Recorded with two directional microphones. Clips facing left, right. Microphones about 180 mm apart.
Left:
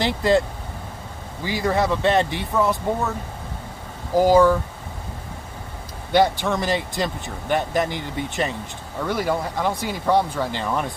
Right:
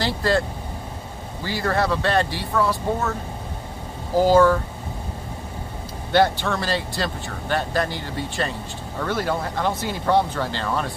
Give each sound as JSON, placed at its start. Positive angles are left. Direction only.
{"t": 0.0, "sound": "speech", "side_deg": 20}
{"t": 1.4, "sound": "speech", "side_deg": 15}
{"t": 4.2, "sound": "speech", "side_deg": 15}
{"t": 6.1, "sound": "speech", "side_deg": 15}